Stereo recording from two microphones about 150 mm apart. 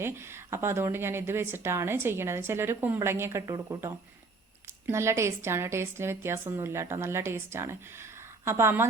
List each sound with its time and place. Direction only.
0.0 s a woman's voice: 15° right (ahead or behind)